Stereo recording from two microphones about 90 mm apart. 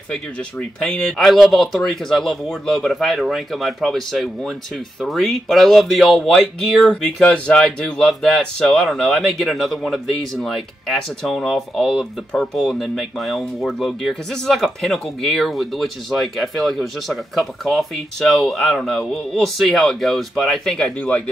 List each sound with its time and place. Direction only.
0.1 s speech: 10° left (ahead or behind)